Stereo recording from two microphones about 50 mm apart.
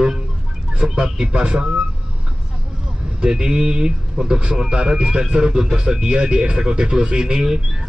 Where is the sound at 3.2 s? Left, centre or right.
Centre.